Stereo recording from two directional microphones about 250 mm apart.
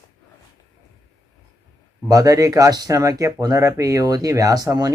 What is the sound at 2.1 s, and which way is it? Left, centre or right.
A man's voice, centre.